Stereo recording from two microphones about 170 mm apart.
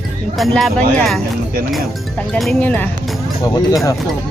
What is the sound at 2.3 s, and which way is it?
Speech, 5° left (ahead or behind).